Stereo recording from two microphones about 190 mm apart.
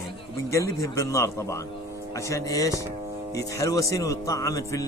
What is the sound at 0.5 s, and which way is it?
Speech, 15° left (ahead or behind).